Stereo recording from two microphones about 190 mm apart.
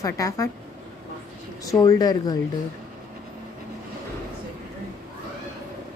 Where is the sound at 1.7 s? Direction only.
20° left (ahead or behind).